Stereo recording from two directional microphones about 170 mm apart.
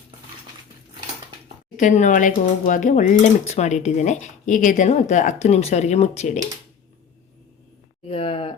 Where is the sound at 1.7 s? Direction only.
45° left (ahead or behind).